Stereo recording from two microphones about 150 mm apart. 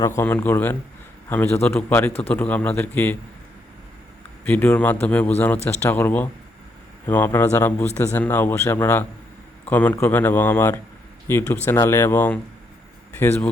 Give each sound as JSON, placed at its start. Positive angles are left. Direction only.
{"t": 0.0, "sound": "a man's voice", "side_deg": 15}
{"t": 4.4, "sound": "a man's voice", "side_deg": 15}